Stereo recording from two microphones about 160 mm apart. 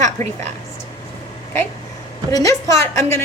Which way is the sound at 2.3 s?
25° left (ahead or behind).